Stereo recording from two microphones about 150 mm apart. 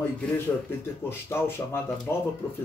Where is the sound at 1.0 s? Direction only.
15° left (ahead or behind).